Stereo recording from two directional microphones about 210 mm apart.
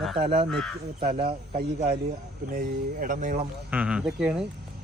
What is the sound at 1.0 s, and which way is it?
Speech, 30° right (ahead or behind).